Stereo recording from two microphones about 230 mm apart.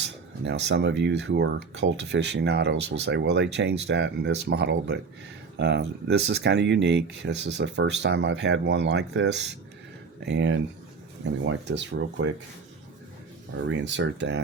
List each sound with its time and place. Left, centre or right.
0.0 s speech: right
13.6 s speech: right